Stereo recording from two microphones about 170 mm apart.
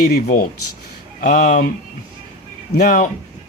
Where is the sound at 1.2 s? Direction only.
50° left (ahead or behind).